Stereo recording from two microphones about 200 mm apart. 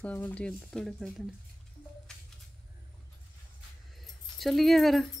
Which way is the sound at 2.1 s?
5° left (ahead or behind).